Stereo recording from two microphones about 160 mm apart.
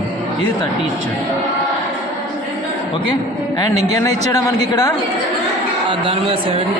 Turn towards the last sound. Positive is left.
turn(degrees=-30)  # may be behind; listen again after turning